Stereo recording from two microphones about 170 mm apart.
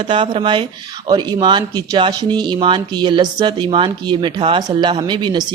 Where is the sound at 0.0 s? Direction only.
30° right (ahead or behind).